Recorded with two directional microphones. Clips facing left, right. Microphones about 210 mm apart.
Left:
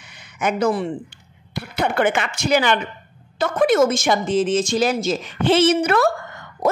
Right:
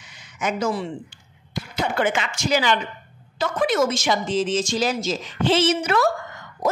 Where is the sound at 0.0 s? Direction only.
60° left (ahead or behind).